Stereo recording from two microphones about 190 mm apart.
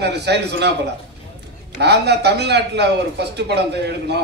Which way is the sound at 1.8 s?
60° right (ahead or behind).